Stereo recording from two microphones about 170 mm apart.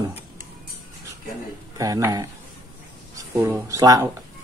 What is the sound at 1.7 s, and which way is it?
Speech, 20° right (ahead or behind).